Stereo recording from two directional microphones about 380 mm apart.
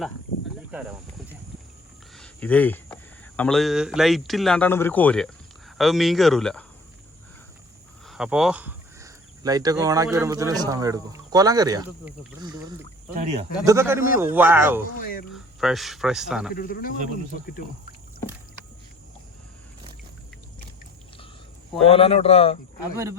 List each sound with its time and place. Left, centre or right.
0.7 s speech: centre
2.1 s speech: centre
8.0 s speech: centre
16.6 s speech: left
21.8 s speech: centre